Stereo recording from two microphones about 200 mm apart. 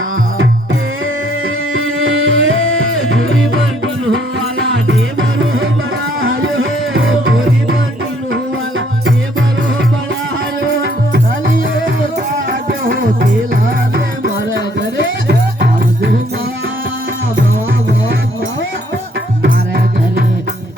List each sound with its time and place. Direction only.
1.7 s music: 90° right
4.6 s music: 70° right (ahead or behind)
6.2 s music: 90° right
14.5 s music: 65° right (ahead or behind)